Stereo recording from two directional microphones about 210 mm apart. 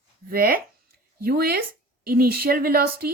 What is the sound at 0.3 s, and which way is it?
A woman's voice, 45° right (ahead or behind).